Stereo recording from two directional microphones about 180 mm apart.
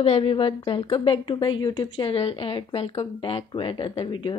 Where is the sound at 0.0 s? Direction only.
30° left (ahead or behind).